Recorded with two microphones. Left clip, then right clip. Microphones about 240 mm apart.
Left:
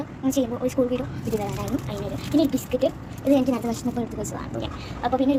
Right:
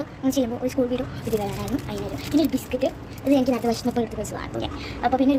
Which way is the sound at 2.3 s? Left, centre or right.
Centre.